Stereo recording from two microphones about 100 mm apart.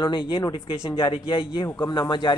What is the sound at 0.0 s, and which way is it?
Speech, 55° left (ahead or behind).